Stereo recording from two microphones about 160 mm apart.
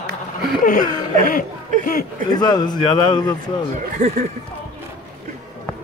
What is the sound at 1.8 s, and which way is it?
Speech, 65° left (ahead or behind).